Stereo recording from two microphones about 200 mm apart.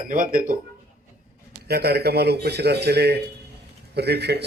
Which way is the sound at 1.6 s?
50° right (ahead or behind).